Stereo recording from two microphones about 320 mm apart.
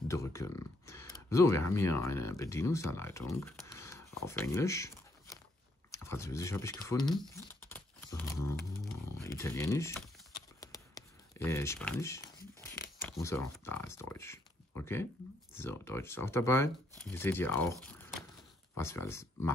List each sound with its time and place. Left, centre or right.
0.1 s speech: centre
7.1 s crumpling: centre
13.0 s speech: centre